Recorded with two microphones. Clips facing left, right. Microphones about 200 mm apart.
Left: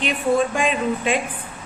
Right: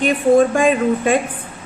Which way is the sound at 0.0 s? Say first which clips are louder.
Right 7 dB; 50° right (ahead or behind).